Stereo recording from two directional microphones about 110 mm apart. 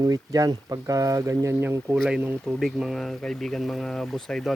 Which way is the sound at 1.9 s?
Centre (ahead or behind).